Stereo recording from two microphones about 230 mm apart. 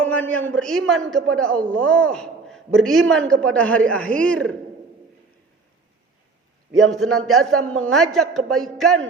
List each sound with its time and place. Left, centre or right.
0.0 s a man's voice: centre
7.2 s a man's voice: centre
7.6 s a woman's voice: right
7.9 s a man's voice: centre